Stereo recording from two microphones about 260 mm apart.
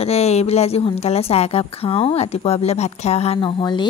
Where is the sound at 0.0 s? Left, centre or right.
Left.